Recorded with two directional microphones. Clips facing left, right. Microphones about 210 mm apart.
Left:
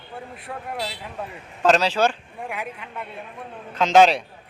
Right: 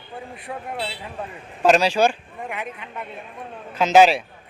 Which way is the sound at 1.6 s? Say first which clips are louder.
Right 2 dB; 10° right (ahead or behind).